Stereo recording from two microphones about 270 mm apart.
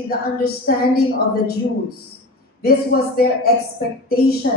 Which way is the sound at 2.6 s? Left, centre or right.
Left.